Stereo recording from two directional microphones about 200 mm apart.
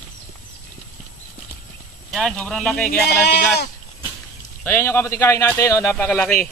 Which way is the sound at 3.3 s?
55° left (ahead or behind).